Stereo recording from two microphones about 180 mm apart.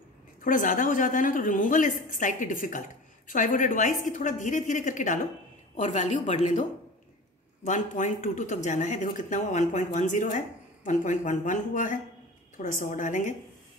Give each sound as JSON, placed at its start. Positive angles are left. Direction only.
{"t": 0.4, "sound": "speech", "side_deg": 45}
{"t": 7.6, "sound": "speech", "side_deg": 45}